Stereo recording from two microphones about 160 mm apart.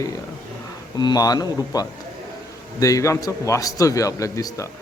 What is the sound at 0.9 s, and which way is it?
A man's voice, 25° left (ahead or behind).